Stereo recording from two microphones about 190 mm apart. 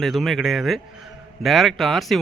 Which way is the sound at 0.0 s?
Centre (ahead or behind).